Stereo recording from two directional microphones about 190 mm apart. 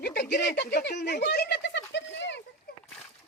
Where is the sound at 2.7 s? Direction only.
55° left (ahead or behind).